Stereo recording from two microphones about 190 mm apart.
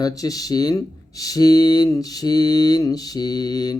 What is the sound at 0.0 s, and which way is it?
Speech, 20° left (ahead or behind).